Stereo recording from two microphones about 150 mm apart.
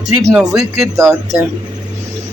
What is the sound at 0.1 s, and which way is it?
Speech, 20° right (ahead or behind).